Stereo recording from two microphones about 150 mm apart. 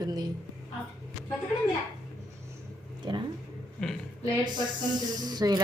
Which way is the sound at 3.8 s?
5° left (ahead or behind).